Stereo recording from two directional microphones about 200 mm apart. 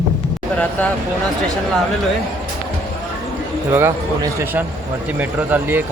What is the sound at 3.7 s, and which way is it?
Speech, 15° right (ahead or behind).